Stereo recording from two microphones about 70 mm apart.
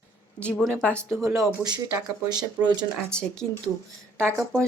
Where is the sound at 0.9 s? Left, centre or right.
Right.